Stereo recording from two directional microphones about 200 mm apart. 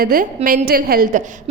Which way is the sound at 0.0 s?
45° right (ahead or behind).